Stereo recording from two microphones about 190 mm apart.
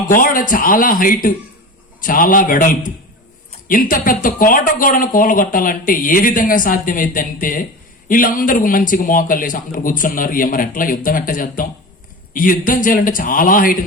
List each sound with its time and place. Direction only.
0.1 s speech: 45° left (ahead or behind)